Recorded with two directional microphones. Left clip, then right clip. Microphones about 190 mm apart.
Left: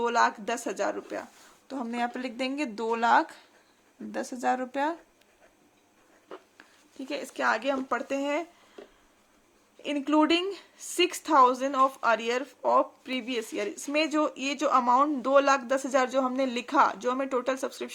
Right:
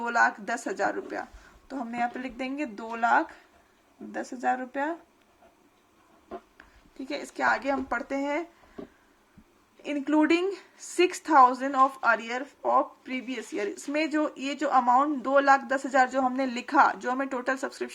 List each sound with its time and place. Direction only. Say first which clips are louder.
0.0 s a man's voice: even; 25° left (ahead or behind)
7.1 s a man's voice: right 1 dB; 25° left (ahead or behind)
9.8 s a man's voice: even; 30° left (ahead or behind)